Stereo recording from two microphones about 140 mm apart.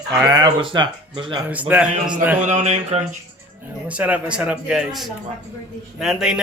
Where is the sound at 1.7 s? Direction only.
10° right (ahead or behind).